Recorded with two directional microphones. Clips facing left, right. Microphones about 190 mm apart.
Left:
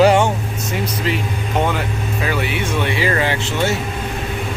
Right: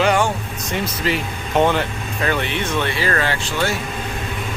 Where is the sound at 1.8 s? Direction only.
5° left (ahead or behind).